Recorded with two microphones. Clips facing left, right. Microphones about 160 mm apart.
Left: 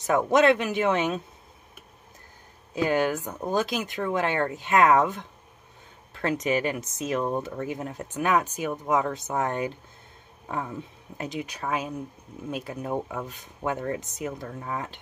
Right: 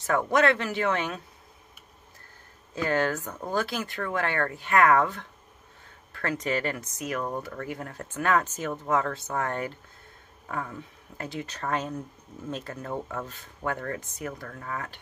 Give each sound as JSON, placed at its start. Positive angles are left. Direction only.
{"t": 0.0, "sound": "speech", "side_deg": 20}
{"t": 2.7, "sound": "speech", "side_deg": 15}